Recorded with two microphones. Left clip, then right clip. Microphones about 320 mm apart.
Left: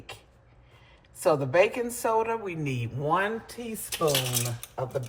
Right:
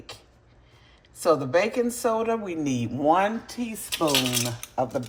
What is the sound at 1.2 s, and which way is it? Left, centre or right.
A woman's voice, centre.